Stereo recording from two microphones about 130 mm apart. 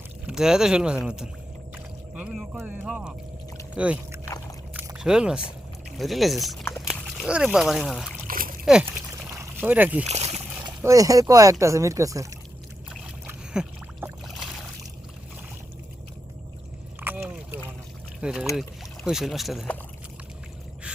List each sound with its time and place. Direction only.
0.3 s speech: 5° right (ahead or behind)
1.7 s boat: 5° right (ahead or behind)
2.8 s speech: 5° right (ahead or behind)
4.7 s a sound: 10° right (ahead or behind)
6.0 s speech: centre (ahead or behind)
8.3 s splash: 90° right
8.6 s speech: 5° right (ahead or behind)
9.3 s pour: 25° right (ahead or behind)
9.6 s speech: 15° right (ahead or behind)
10.1 s speech: 55° right (ahead or behind)
10.8 s speech: 25° right (ahead or behind)
13.2 s boat: 10° right (ahead or behind)
17.0 s rowboat: 15° right (ahead or behind)
18.2 s speech: 5° right (ahead or behind)